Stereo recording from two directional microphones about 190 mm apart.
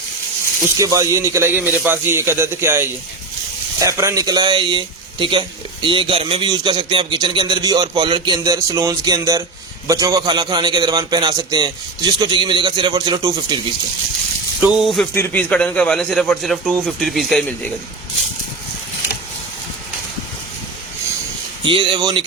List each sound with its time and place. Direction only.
0.6 s speech: 15° right (ahead or behind)
14.6 s a man's voice: 5° right (ahead or behind)
15.1 s a man's voice: 10° left (ahead or behind)
21.6 s speech: 25° right (ahead or behind)